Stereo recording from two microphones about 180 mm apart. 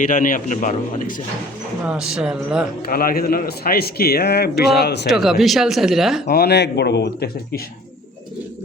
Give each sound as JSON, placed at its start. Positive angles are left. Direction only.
{"t": 0.0, "sound": "a man's voice", "side_deg": 45}
{"t": 1.9, "sound": "speech", "side_deg": -5}
{"t": 2.8, "sound": "a man's voice", "side_deg": 55}
{"t": 5.0, "sound": "speech", "side_deg": 0}
{"t": 6.2, "sound": "speech", "side_deg": 60}